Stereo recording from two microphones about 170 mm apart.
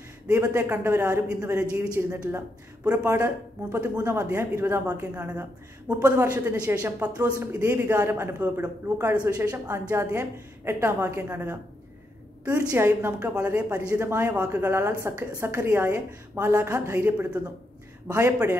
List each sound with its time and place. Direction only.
0.3 s a woman's voice: 15° right (ahead or behind)
12.5 s a woman's voice: 15° right (ahead or behind)